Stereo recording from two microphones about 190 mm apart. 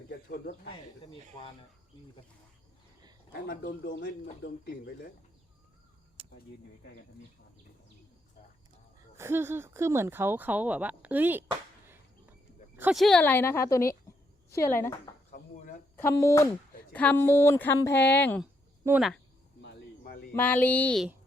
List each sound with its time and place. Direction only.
0.1 s speech: 55° left (ahead or behind)
3.3 s speech: 55° left (ahead or behind)
6.2 s a sound: 30° right (ahead or behind)
9.1 s speech: 10° right (ahead or behind)
12.7 s speech: 5° right (ahead or behind); by 14.9 s 10° left (ahead or behind)
16.0 s speech: 15° left (ahead or behind)
18.9 s speech: centre (ahead or behind)
20.3 s speech: 10° left (ahead or behind)